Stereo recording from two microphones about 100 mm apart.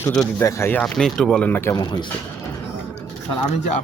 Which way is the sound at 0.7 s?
10° left (ahead or behind).